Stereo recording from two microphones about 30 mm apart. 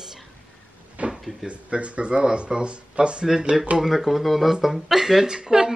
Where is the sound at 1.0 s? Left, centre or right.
Right.